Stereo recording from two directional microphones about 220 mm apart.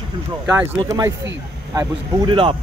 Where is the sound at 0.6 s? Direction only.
15° right (ahead or behind).